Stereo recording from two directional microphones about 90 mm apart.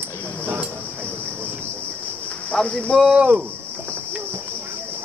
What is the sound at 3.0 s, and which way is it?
Speech, 10° right (ahead or behind).